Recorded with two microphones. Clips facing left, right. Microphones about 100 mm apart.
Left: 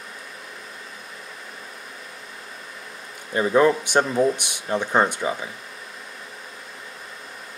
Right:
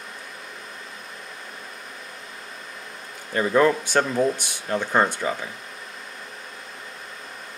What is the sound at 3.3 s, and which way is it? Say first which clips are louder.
Speech: left 1 dB; 15° left (ahead or behind).